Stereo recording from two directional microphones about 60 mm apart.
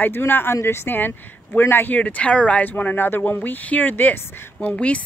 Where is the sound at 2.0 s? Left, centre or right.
Left.